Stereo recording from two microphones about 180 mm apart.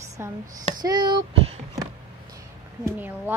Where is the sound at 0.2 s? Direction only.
15° right (ahead or behind).